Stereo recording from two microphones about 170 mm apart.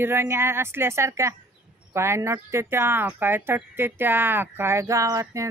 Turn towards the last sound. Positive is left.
turn(degrees=-20)  # may be behind; listen again after turning